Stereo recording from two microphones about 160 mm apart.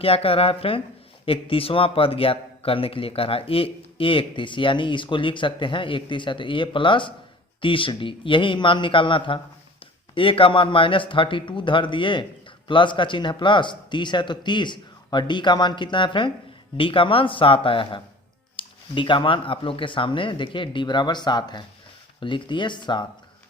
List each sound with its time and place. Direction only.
0.0 s speech: 35° left (ahead or behind)